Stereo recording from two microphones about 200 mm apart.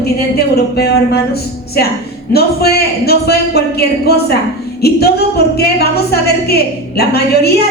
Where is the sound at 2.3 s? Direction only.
50° left (ahead or behind).